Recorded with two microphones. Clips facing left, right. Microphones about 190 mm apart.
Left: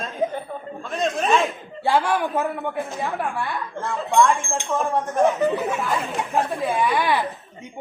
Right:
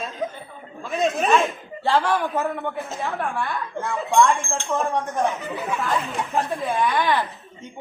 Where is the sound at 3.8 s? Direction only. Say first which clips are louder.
Even; centre (ahead or behind).